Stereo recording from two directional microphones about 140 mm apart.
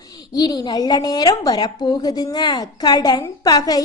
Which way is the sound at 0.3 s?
30° left (ahead or behind).